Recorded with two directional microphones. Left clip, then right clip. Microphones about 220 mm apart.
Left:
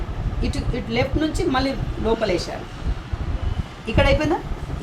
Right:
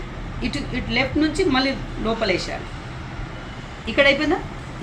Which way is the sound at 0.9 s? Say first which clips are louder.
Right 2 dB; 15° left (ahead or behind).